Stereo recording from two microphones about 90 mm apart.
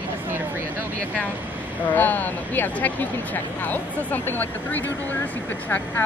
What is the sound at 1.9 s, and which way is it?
Speech, 20° left (ahead or behind).